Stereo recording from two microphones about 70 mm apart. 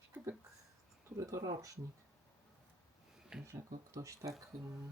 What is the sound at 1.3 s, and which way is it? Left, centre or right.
Speech, right.